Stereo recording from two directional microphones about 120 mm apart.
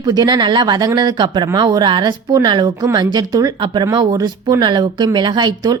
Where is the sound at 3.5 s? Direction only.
45° right (ahead or behind).